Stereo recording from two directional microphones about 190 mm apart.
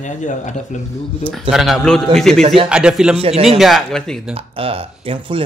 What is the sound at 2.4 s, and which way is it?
Speech, 30° right (ahead or behind).